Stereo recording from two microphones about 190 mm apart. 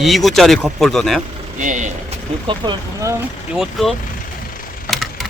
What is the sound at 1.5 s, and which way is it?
Speech, 40° right (ahead or behind).